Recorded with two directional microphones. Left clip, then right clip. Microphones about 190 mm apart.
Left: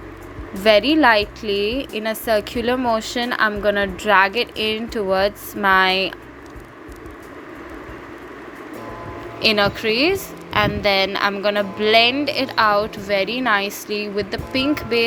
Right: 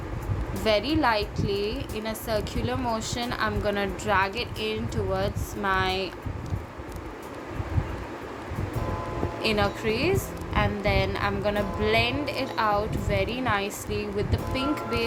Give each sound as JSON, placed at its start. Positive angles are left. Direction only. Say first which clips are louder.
{"t": 0.6, "sound": "a woman's voice", "louder": "left 10 dB", "side_deg": 35}
{"t": 9.4, "sound": "a woman's voice", "louder": "left 9 dB", "side_deg": 30}